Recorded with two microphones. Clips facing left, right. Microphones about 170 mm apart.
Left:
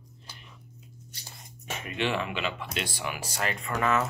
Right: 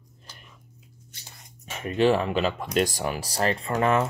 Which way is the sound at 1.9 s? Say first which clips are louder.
Right 9 dB; 35° right (ahead or behind).